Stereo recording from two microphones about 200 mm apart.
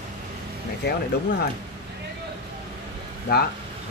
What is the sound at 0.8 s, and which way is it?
Speech, 55° left (ahead or behind).